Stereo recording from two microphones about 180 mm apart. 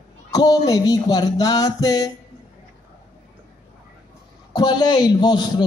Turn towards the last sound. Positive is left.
turn(degrees=25)  # may be behind; listen again after turning